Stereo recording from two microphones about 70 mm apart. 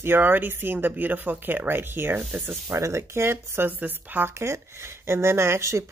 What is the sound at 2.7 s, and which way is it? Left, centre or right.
Speech, right.